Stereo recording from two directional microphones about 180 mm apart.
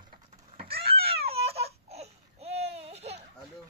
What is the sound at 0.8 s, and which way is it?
Baby cry, 35° right (ahead or behind).